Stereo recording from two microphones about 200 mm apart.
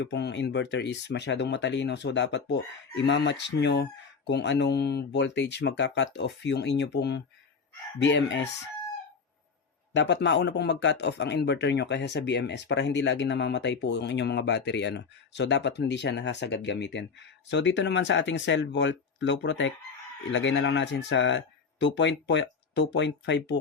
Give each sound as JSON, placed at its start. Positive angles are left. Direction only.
{"t": 0.0, "sound": "a man's voice", "side_deg": 60}
{"t": 9.9, "sound": "a man's voice", "side_deg": 60}